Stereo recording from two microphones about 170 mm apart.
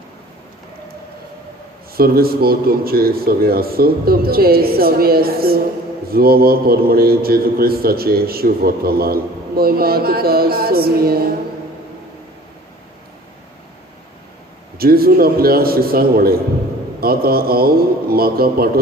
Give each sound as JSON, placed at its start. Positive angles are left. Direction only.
{"t": 2.0, "sound": "a man's voice", "side_deg": -60}
{"t": 14.8, "sound": "a man's voice", "side_deg": -60}